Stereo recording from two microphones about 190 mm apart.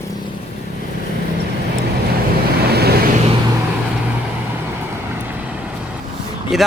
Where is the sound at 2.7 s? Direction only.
55° right (ahead or behind).